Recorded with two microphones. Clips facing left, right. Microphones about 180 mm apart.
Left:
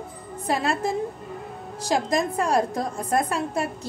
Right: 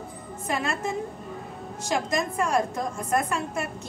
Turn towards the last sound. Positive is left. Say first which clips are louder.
# left 2 dB
turn(degrees=35)  # may be behind; listen again after turning